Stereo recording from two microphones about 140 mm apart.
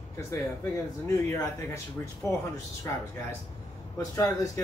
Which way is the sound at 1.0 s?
25° left (ahead or behind).